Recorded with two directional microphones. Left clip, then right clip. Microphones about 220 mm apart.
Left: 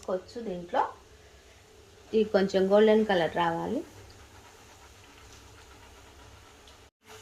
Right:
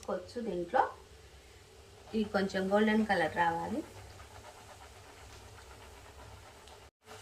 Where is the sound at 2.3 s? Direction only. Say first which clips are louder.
Left 6 dB; 35° left (ahead or behind).